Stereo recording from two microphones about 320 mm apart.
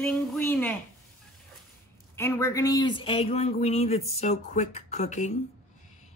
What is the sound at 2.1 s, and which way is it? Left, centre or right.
Speech, centre.